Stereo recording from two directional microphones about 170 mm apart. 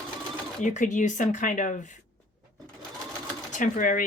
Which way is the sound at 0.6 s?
45° left (ahead or behind).